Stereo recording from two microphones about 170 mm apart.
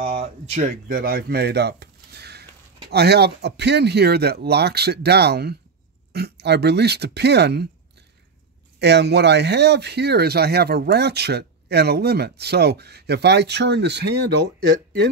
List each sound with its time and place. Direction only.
0.0 s speech: 35° right (ahead or behind); by 7.6 s 80° right
8.7 s speech: 80° right